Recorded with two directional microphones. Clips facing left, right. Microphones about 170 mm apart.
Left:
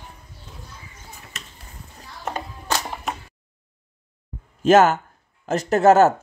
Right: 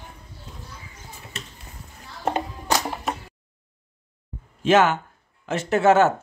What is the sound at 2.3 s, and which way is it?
Music, 30° right (ahead or behind).